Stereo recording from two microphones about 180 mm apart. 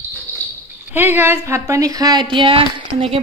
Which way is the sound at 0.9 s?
10° right (ahead or behind).